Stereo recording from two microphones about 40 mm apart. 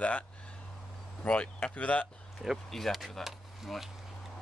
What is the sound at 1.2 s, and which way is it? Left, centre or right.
Speech, left.